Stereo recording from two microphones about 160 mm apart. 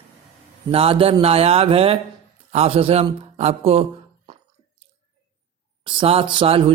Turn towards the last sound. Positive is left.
turn(degrees=-35)  # may be behind; listen again after turning